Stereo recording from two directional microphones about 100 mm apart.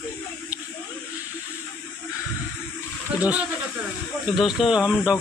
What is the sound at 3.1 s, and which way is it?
Speech, 15° right (ahead or behind).